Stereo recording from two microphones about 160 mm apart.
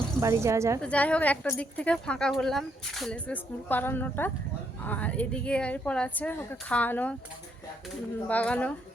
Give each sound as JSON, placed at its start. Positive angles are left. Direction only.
{"t": 0.2, "sound": "speech", "side_deg": -20}
{"t": 0.8, "sound": "speech", "side_deg": 10}
{"t": 8.3, "sound": "speech", "side_deg": 10}